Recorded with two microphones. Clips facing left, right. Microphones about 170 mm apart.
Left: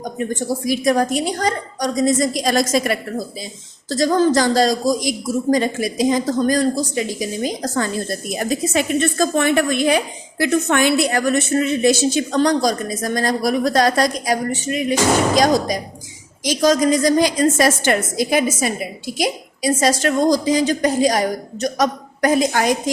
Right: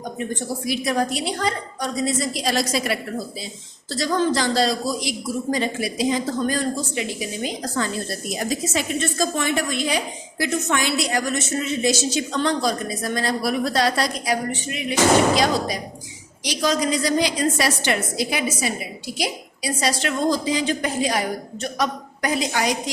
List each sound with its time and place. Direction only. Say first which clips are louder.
0.3 s a woman's voice: left 5 dB; 40° left (ahead or behind)
8.4 s a woman's voice: left 5 dB; 60° left (ahead or behind)
12.4 s a woman's voice: left 5 dB; 40° left (ahead or behind)